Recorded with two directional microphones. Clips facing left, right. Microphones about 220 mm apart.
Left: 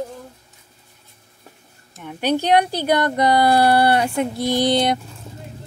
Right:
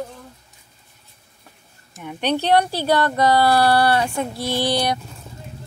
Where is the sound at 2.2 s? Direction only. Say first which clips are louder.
Left 1 dB; 10° left (ahead or behind).